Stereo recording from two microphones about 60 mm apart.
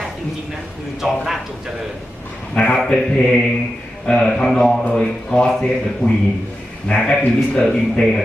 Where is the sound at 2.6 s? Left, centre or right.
Centre.